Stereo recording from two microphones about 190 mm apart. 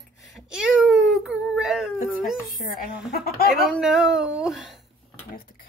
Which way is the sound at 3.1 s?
55° left (ahead or behind).